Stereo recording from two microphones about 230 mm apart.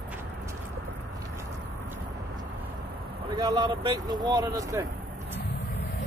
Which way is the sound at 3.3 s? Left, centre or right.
Centre.